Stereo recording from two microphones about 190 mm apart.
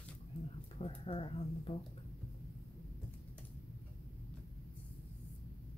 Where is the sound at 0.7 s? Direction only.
30° left (ahead or behind).